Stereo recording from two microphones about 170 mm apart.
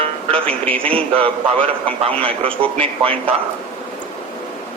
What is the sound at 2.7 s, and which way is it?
Speech, 35° right (ahead or behind).